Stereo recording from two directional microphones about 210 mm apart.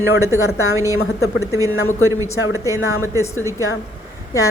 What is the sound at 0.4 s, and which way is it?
Speech, 80° left.